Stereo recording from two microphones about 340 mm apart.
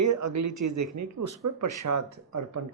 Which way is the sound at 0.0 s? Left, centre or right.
Right.